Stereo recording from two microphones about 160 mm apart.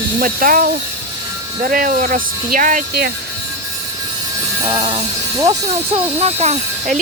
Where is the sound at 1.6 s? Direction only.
60° right (ahead or behind).